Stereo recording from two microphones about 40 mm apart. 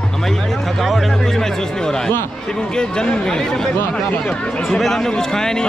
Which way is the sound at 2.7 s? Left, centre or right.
Left.